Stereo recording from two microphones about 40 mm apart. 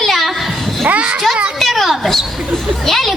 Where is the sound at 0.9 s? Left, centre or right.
Right.